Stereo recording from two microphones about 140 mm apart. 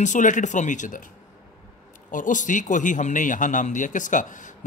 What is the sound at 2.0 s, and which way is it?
A man's voice, 70° left (ahead or behind).